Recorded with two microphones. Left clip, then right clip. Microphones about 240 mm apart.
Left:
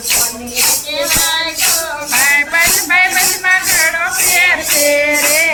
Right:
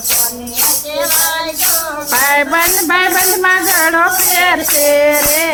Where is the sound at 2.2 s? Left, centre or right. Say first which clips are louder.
Left 1 dB; right.